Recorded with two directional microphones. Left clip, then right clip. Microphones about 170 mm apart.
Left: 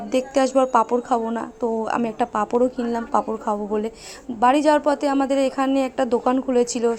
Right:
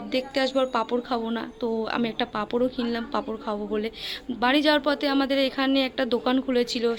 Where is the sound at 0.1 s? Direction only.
25° left (ahead or behind).